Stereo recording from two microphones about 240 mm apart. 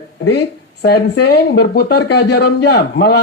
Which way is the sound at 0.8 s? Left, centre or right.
Left.